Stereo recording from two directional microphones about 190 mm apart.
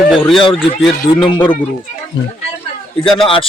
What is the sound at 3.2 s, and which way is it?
Speech, 30° left (ahead or behind).